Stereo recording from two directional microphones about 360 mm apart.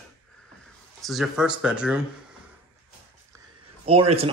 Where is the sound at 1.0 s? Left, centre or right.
Centre.